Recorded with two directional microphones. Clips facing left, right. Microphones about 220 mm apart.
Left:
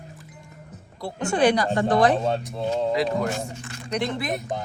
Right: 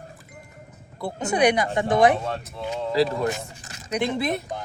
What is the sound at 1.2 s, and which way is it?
Speech, 20° right (ahead or behind).